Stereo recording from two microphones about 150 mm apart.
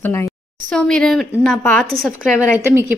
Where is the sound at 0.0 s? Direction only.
15° left (ahead or behind).